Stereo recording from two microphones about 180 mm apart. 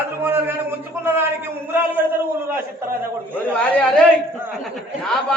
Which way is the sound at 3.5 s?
5° left (ahead or behind).